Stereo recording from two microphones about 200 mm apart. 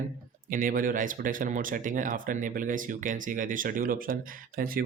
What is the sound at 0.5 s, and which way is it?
Speech, 45° right (ahead or behind).